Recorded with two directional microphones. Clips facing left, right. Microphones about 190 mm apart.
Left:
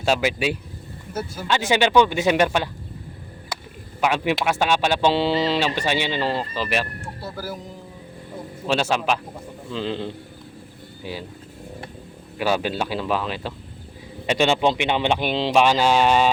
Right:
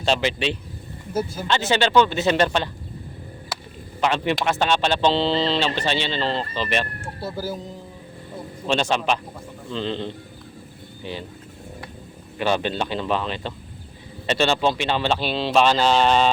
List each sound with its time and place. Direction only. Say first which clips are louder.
0.0 s speech: left 1 dB; 5° left (ahead or behind)
4.0 s speech: even; 10° left (ahead or behind)
7.3 s speech: right 3 dB; 25° right (ahead or behind)
8.6 s speech: even; 5° left (ahead or behind)
12.4 s speech: even; 5° left (ahead or behind)